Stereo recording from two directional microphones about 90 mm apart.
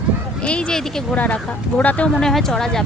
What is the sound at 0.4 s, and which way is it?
Speech, 10° left (ahead or behind).